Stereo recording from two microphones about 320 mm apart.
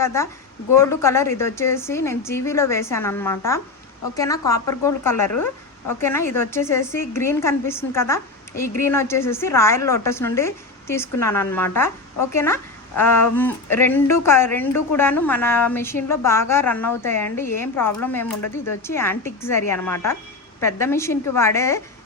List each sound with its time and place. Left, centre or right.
0.0 s a woman's voice: centre
18.4 s speech: left
18.9 s a woman's voice: centre